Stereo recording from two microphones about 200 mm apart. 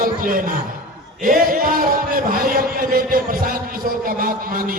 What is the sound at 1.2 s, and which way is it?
A man's voice, 45° right (ahead or behind).